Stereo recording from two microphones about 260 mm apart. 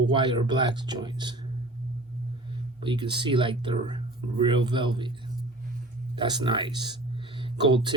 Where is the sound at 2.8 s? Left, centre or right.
Centre.